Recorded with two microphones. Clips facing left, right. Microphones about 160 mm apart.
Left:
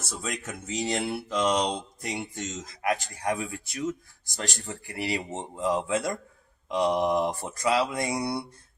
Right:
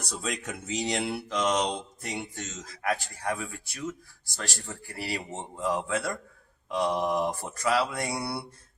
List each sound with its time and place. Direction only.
0.0 s speech: centre (ahead or behind)
4.4 s speech: 25° left (ahead or behind)